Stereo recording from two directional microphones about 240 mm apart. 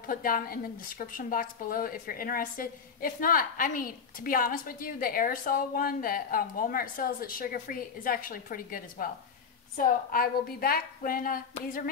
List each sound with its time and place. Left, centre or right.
0.0 s a woman's voice: left